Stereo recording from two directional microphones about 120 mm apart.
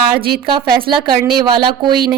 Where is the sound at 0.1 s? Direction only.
40° right (ahead or behind).